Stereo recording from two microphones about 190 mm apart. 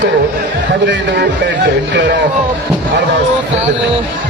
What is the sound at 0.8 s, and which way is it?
Speech, 65° right (ahead or behind).